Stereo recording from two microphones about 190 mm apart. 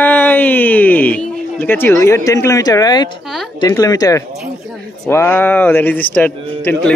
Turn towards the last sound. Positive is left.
turn(degrees=5)  # may be behind; listen again after turning